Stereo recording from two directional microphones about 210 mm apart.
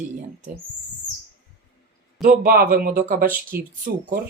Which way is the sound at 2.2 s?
40° right (ahead or behind).